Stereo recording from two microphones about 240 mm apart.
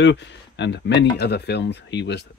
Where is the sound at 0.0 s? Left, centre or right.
Left.